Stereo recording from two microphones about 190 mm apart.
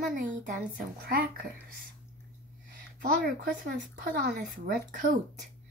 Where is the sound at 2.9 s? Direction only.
50° right (ahead or behind).